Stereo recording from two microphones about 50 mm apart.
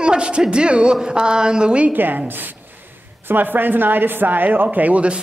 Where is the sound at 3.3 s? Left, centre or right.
Right.